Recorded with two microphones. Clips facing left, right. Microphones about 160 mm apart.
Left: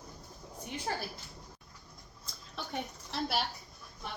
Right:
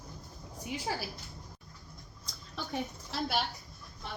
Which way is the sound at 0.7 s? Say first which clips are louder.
Right 1 dB; 5° right (ahead or behind).